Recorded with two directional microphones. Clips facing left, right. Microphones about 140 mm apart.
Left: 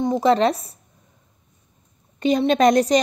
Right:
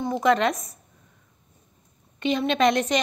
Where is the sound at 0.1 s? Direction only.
30° left (ahead or behind).